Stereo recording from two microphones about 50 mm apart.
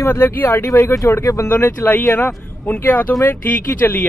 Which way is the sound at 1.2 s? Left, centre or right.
Left.